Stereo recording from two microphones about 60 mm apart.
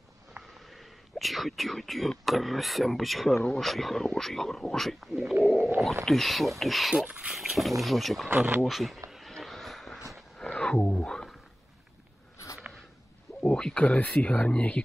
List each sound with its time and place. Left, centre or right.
0.6 s speech: centre
5.1 s speech: centre
6.0 s speech: centre
7.1 s speech: right
7.3 s speech: centre
9.4 s vehicle: centre
10.3 s wild animals: centre
13.4 s speech: centre